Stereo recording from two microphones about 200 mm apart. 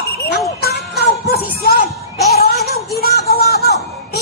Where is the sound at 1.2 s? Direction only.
50° left (ahead or behind).